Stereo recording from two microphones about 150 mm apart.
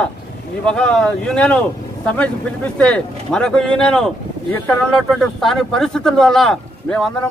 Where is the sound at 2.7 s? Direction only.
5° left (ahead or behind).